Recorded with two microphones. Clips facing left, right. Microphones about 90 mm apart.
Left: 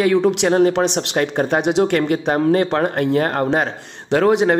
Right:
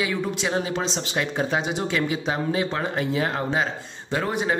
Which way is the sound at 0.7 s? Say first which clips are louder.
Left 8 dB; 65° left (ahead or behind).